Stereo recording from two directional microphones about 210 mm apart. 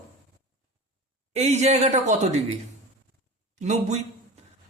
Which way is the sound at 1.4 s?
30° right (ahead or behind).